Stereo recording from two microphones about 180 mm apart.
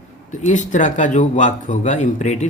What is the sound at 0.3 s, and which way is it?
Speech, 45° left (ahead or behind).